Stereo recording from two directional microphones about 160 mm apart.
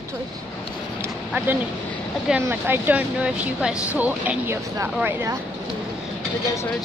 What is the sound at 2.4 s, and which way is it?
Speech, 10° right (ahead or behind).